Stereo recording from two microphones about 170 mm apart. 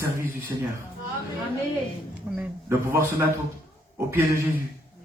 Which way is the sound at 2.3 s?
10° right (ahead or behind).